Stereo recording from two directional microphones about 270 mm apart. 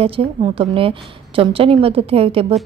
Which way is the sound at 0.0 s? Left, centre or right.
Right.